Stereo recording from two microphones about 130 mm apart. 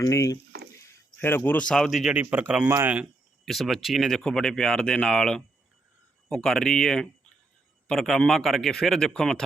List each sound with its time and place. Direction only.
0.0 s speech: 25° left (ahead or behind); by 3.1 s 10° right (ahead or behind)
3.4 s speech: centre (ahead or behind)